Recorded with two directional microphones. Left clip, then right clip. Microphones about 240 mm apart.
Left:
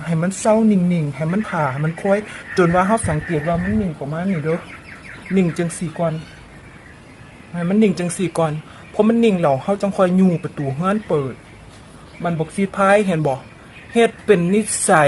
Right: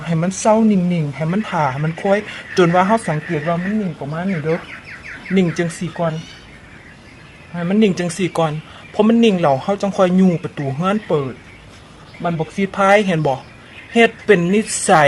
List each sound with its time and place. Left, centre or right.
0.0 s a woman's voice: centre
7.5 s a woman's voice: centre